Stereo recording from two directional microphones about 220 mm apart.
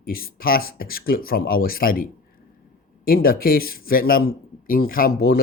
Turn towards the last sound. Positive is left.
turn(degrees=45)  # may be behind; listen again after turning